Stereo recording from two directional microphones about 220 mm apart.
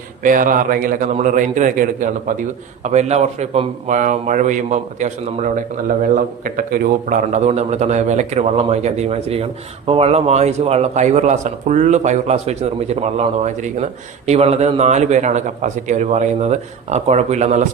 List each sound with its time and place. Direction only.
0.2 s a man's voice: 35° right (ahead or behind)